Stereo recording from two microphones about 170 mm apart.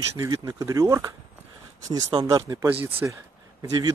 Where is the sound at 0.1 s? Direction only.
20° right (ahead or behind).